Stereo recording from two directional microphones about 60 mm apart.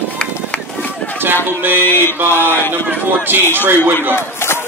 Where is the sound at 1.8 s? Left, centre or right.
Left.